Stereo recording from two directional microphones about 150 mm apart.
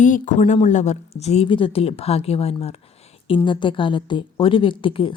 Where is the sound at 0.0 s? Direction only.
60° left (ahead or behind).